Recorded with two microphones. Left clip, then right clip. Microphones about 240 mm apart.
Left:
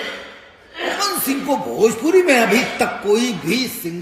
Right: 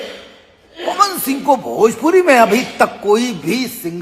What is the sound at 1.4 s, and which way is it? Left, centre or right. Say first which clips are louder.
Speech: right 5 dB; right.